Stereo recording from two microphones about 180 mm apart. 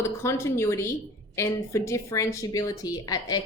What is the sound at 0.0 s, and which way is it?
A woman's voice, 15° left (ahead or behind).